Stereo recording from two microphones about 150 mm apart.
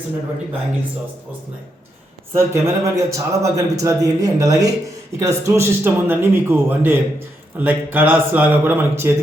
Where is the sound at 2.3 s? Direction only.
20° right (ahead or behind).